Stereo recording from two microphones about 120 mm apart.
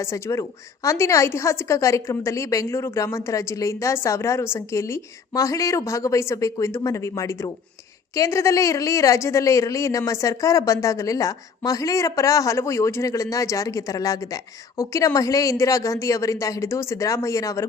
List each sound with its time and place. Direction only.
0.0 s speech: 25° left (ahead or behind)